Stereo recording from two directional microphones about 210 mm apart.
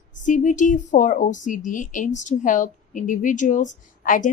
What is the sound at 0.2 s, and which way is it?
Speech, 35° left (ahead or behind).